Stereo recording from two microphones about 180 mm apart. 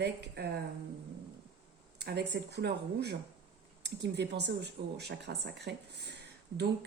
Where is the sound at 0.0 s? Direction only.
65° right (ahead or behind).